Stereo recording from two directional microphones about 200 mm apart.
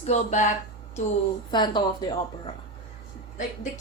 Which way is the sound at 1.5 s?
20° left (ahead or behind).